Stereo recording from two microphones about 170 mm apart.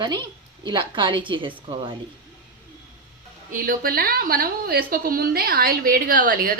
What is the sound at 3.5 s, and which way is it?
A woman's voice, 55° right (ahead or behind).